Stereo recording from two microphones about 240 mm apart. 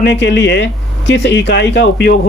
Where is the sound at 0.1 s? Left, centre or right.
Left.